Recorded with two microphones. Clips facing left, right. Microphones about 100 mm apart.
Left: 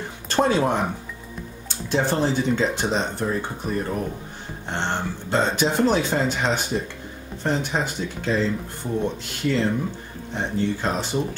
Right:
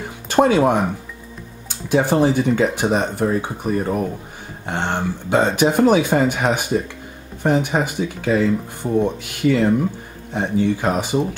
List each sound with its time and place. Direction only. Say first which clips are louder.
0.3 s speech: right 5 dB; 10° right (ahead or behind)
1.9 s speech: right 6 dB; 10° right (ahead or behind)
5.4 s speech: right 5 dB; 55° right (ahead or behind)
5.8 s speech: right 6 dB; 10° right (ahead or behind)
7.7 s speech: right 5 dB; 10° right (ahead or behind)